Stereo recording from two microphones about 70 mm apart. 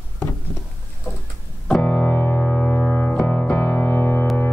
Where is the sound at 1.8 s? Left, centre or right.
Centre.